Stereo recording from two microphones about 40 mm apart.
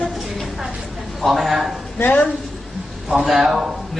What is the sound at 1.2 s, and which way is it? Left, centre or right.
Speech, centre.